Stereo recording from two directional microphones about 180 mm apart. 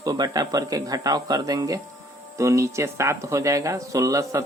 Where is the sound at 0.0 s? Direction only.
20° right (ahead or behind).